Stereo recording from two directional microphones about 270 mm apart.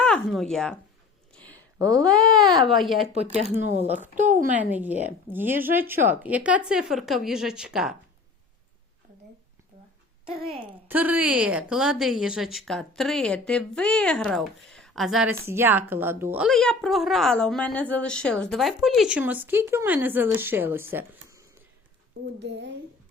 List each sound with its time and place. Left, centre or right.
0.0 s speech: centre
1.3 s a sound: centre
2.6 s speech: centre
3.4 s speech: right
4.5 s speech: centre
10.8 s speech: centre
22.4 s speech: right